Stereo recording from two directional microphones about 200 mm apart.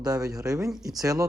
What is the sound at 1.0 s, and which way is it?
Speech, 20° right (ahead or behind).